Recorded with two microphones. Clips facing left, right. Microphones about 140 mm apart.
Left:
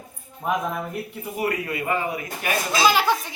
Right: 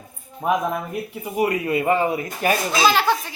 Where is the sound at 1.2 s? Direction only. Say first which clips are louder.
Right 5 dB; 20° right (ahead or behind).